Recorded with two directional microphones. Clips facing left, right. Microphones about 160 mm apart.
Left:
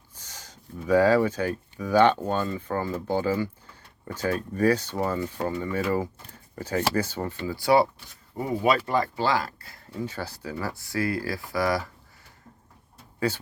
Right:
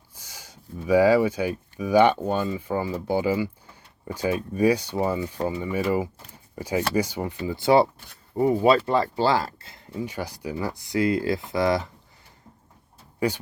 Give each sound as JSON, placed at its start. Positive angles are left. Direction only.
{"t": 0.2, "sound": "speech", "side_deg": -10}
{"t": 13.1, "sound": "speech", "side_deg": -15}